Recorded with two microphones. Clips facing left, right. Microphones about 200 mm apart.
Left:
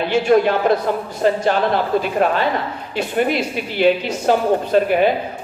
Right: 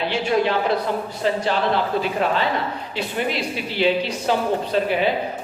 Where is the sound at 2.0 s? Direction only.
50° left (ahead or behind).